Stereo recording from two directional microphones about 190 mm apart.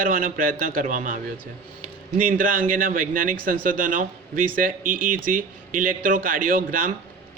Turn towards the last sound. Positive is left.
turn(degrees=-45)  # may be behind; listen again after turning